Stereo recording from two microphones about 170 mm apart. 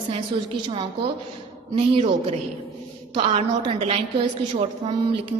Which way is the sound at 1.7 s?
35° right (ahead or behind).